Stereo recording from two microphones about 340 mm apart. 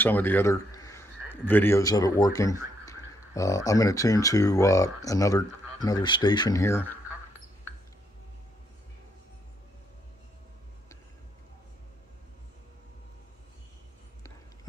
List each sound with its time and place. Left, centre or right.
0.0 s a man's voice: centre